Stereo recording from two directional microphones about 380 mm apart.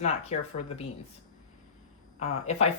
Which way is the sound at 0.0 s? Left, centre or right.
Centre.